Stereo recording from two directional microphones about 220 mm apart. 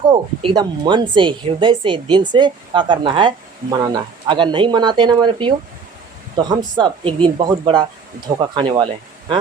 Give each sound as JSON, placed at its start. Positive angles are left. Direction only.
{"t": 0.1, "sound": "speech", "side_deg": -20}